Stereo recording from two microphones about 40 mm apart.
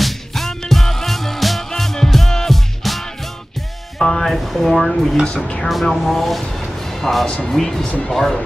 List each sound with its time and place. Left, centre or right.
0.0 s music: centre
4.0 s music: centre
4.3 s speech: centre
5.2 s speech: left
5.9 s speech: centre